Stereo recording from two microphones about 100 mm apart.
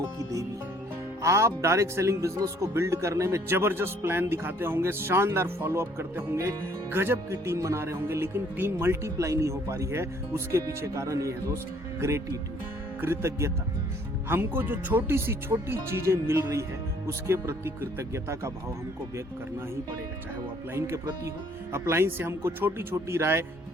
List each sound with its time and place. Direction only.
0.0 s speech: 30° right (ahead or behind)
20.7 s speech: 25° right (ahead or behind)